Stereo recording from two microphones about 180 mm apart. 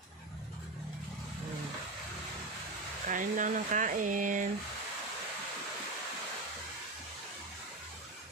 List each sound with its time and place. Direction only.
3.1 s speech: 45° right (ahead or behind)